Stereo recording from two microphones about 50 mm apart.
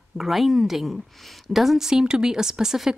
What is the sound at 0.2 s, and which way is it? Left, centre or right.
A woman's voice, centre.